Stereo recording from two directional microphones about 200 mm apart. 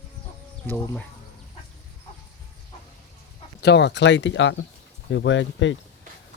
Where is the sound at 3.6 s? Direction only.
60° left (ahead or behind).